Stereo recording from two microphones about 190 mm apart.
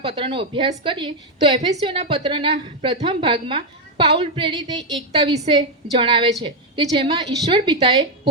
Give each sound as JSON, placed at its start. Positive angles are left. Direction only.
{"t": 0.1, "sound": "a woman's voice", "side_deg": -30}